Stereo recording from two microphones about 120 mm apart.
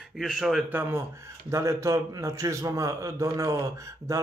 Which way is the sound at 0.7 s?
20° right (ahead or behind).